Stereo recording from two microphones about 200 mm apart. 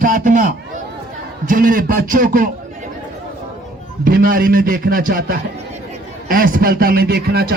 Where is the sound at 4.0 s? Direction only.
45° right (ahead or behind).